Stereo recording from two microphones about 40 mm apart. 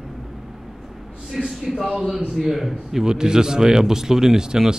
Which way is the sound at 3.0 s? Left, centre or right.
Centre.